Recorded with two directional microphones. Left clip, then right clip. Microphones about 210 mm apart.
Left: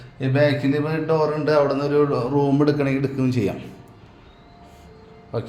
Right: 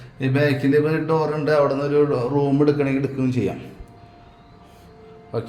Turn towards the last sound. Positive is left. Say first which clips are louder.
# right 1 dB
turn(degrees=-5)  # may be behind; listen again after turning